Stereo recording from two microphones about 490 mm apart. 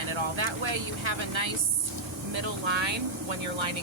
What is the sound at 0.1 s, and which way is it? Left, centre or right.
Speech, right.